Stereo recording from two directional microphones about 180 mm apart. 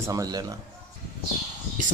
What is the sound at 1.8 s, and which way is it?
Speech, 45° right (ahead or behind).